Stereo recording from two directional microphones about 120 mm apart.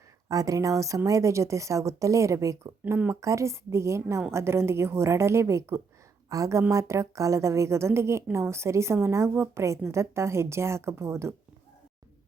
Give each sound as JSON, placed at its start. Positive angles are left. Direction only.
{"t": 0.3, "sound": "a woman's voice", "side_deg": -30}
{"t": 2.8, "sound": "a woman's voice", "side_deg": -15}